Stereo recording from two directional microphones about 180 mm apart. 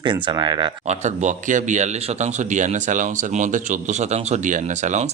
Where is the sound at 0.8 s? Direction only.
40° right (ahead or behind).